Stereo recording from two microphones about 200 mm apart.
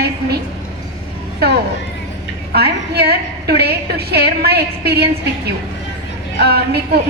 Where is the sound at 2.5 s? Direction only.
55° right (ahead or behind).